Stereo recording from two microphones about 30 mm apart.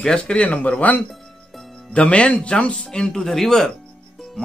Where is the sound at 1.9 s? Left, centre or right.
Left.